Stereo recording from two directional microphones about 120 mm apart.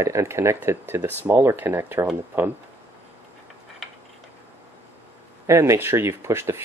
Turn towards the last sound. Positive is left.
turn(degrees=-20)  # may be behind; listen again after turning